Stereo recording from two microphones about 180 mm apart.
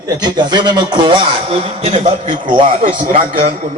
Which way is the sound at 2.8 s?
50° right (ahead or behind).